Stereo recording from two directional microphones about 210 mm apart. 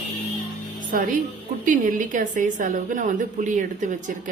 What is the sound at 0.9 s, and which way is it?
A woman's voice, 40° right (ahead or behind).